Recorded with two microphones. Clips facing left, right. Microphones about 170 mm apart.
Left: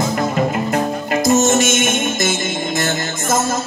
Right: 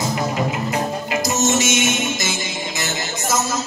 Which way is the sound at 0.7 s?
50° left (ahead or behind).